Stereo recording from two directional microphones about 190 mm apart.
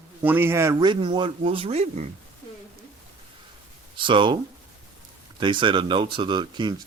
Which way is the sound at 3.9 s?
25° right (ahead or behind).